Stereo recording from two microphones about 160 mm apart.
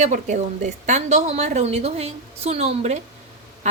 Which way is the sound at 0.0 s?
50° right (ahead or behind).